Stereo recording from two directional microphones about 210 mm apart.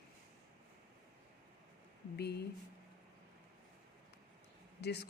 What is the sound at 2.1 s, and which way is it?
Speech, 50° left (ahead or behind).